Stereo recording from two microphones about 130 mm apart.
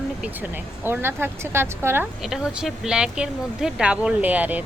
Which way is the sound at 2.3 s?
5° right (ahead or behind).